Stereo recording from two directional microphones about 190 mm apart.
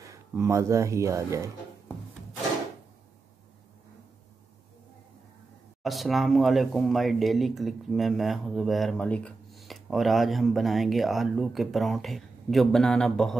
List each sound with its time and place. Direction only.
0.0 s speech: 15° right (ahead or behind)
5.8 s speech: centre (ahead or behind)